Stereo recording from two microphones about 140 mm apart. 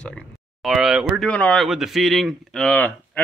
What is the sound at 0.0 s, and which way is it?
Speech, 5° left (ahead or behind).